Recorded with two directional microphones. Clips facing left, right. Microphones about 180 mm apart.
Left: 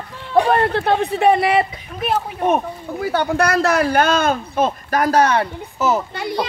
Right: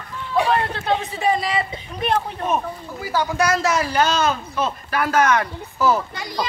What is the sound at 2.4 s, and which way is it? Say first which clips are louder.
Speech: left 5 dB; 60° left (ahead or behind).